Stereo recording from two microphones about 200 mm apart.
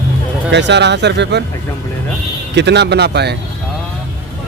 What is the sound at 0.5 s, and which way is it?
Speech, 60° right (ahead or behind).